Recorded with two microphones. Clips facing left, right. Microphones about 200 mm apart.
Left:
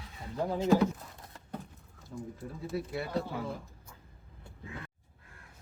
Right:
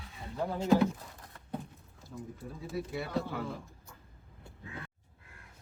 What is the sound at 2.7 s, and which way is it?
Speech, centre (ahead or behind).